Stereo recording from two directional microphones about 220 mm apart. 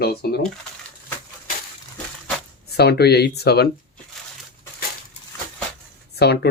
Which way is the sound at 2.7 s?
50° left (ahead or behind).